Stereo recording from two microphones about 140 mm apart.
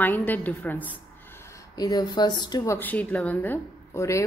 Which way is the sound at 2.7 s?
10° left (ahead or behind).